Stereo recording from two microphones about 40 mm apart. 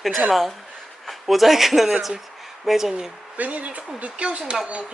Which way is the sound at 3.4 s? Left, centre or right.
Right.